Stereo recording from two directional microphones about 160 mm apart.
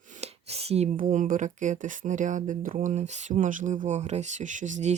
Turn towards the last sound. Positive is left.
turn(degrees=-50)  # may be behind; listen again after turning